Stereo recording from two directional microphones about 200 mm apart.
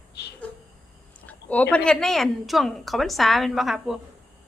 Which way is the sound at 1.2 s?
5° left (ahead or behind).